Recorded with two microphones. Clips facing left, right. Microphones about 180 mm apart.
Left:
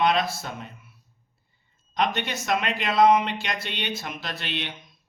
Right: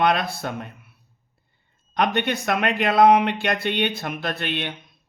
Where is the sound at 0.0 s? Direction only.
55° right (ahead or behind).